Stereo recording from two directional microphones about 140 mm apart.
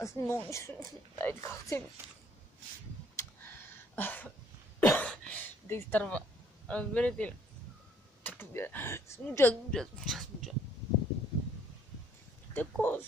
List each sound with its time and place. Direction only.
0.0 s a woman's voice: 20° left (ahead or behind)
3.2 s a sound: 15° left (ahead or behind)
4.7 s cough: 10° left (ahead or behind)
5.9 s speech: 10° left (ahead or behind)
9.7 s speech: 5° left (ahead or behind)
12.5 s speech: 15° left (ahead or behind)